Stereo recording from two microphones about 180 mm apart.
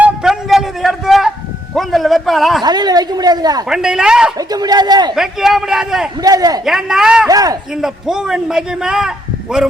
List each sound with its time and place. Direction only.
0.0 s a sound: 5° right (ahead or behind)
2.6 s a sound: 20° right (ahead or behind)
3.7 s a man's voice: 5° right (ahead or behind)
4.4 s speech: 20° right (ahead or behind)
5.1 s a man's voice: centre (ahead or behind)
6.1 s speech: 20° right (ahead or behind)
6.7 s a man's voice: centre (ahead or behind)
7.3 s speech: 20° right (ahead or behind)
7.7 s a man's voice: centre (ahead or behind)